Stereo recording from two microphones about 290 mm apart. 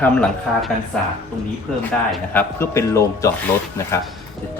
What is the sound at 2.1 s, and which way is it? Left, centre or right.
A man's voice, centre.